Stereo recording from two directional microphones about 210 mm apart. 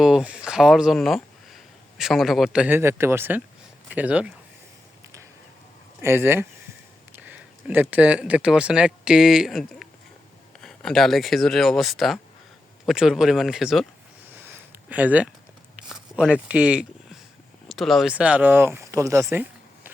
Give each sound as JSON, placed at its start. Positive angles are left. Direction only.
{"t": 0.0, "sound": "speech", "side_deg": -5}
{"t": 6.0, "sound": "speech", "side_deg": -10}
{"t": 14.8, "sound": "speech", "side_deg": -5}